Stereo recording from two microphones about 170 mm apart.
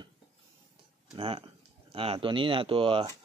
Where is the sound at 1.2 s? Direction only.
35° right (ahead or behind).